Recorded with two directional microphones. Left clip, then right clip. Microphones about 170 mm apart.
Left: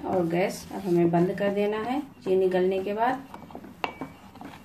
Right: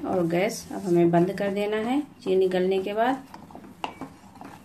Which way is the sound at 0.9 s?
45° right (ahead or behind).